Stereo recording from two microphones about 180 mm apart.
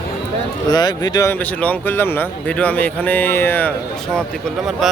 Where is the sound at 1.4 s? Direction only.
10° left (ahead or behind).